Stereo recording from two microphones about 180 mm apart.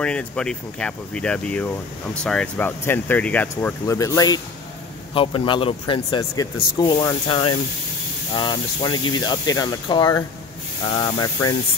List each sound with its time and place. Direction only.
0.0 s speech: 5° left (ahead or behind); by 11.2 s 25° left (ahead or behind)